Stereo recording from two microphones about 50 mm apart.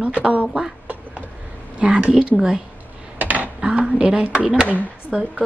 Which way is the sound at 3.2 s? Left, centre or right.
Right.